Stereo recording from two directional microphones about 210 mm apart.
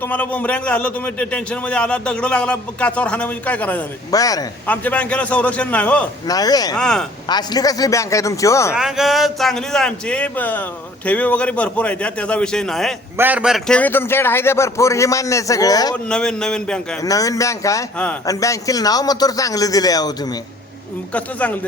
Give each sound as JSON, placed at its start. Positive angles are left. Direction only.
{"t": 0.0, "sound": "a man's voice", "side_deg": 5}
{"t": 6.2, "sound": "a man's voice", "side_deg": 20}
{"t": 6.7, "sound": "a man's voice", "side_deg": 5}
{"t": 7.3, "sound": "a man's voice", "side_deg": 20}
{"t": 8.7, "sound": "a man's voice", "side_deg": 0}
{"t": 16.0, "sound": "a man's voice", "side_deg": 5}
{"t": 17.0, "sound": "a man's voice", "side_deg": 15}
{"t": 21.1, "sound": "a man's voice", "side_deg": 5}